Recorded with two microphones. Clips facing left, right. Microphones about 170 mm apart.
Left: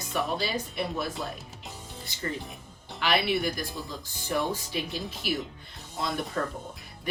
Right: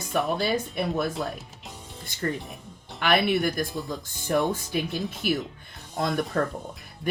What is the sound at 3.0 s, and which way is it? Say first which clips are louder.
Speech: right 4 dB; 50° right (ahead or behind).